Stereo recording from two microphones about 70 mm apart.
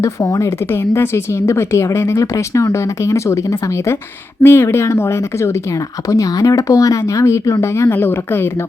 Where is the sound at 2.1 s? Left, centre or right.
Left.